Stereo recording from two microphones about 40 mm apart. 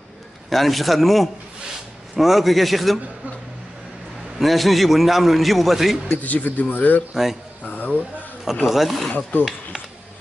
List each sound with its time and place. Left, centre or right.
0.5 s a man's voice: centre
4.4 s a man's voice: centre
6.2 s speech: left
8.6 s a man's voice: centre